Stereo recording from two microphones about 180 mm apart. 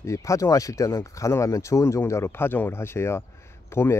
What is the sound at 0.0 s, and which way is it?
Speech, 15° left (ahead or behind).